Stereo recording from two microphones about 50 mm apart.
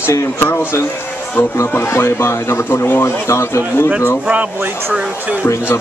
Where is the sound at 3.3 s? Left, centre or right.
Left.